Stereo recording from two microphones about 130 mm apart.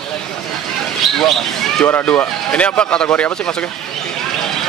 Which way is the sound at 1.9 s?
15° left (ahead or behind).